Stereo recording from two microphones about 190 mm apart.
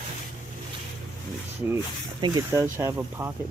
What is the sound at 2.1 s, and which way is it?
Speech, 20° right (ahead or behind).